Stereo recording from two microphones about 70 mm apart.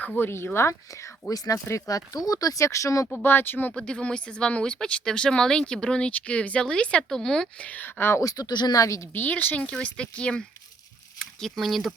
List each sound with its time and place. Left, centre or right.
0.2 s speech: left
1.3 s speech: left
3.2 s speech: left
3.7 s speech: centre
7.7 s speech: left
8.2 s speech: left
9.1 s speech: left
9.6 s speech: centre